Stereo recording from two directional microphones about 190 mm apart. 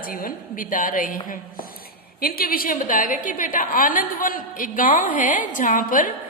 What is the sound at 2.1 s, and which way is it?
A woman's voice, 50° left (ahead or behind).